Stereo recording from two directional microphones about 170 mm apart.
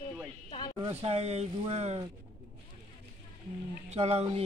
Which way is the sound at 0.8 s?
35° right (ahead or behind).